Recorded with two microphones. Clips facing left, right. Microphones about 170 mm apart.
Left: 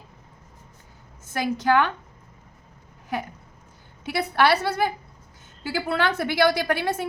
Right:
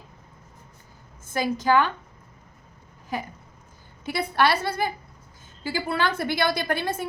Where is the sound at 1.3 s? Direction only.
60° left (ahead or behind).